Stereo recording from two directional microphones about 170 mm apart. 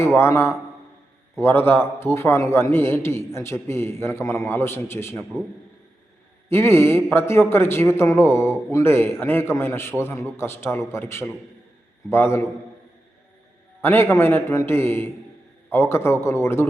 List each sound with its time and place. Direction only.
0.2 s a man's voice: 15° left (ahead or behind)
6.5 s a man's voice: 15° left (ahead or behind)
13.8 s a man's voice: 15° left (ahead or behind)